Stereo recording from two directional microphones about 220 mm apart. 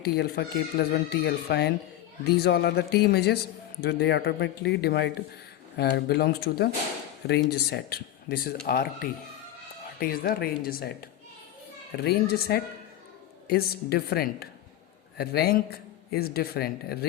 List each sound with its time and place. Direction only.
0.0 s speech: 45° left (ahead or behind)
11.9 s speech: 45° left (ahead or behind)